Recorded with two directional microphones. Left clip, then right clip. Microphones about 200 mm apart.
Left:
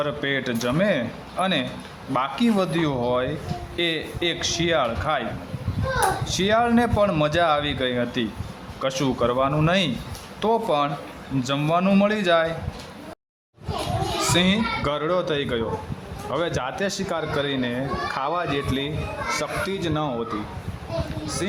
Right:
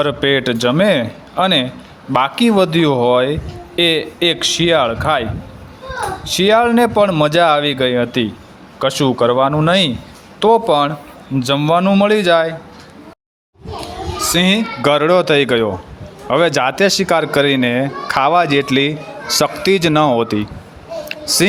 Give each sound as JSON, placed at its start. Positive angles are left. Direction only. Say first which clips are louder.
{"t": 0.0, "sound": "speech", "louder": "right 10 dB", "side_deg": -35}
{"t": 6.2, "sound": "speech", "louder": "right 9 dB", "side_deg": -35}
{"t": 14.2, "sound": "speech", "louder": "right 8 dB", "side_deg": -35}